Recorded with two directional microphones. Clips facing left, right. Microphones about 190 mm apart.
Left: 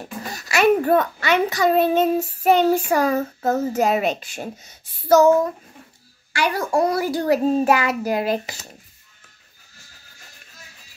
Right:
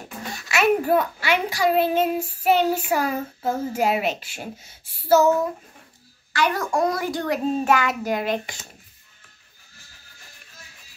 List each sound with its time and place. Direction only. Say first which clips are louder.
0.5 s a child's voice: left 3 dB; 5° right (ahead or behind)
6.5 s a child's voice: left 3 dB; 35° left (ahead or behind)